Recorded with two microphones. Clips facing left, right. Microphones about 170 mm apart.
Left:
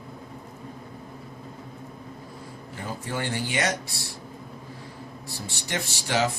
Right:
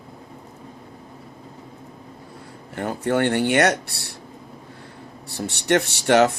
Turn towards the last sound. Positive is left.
turn(degrees=-65)  # may be behind; listen again after turning